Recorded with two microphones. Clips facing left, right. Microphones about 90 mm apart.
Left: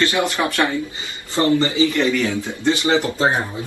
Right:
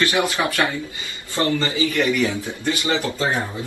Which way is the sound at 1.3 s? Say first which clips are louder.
Left 4 dB; 25° left (ahead or behind).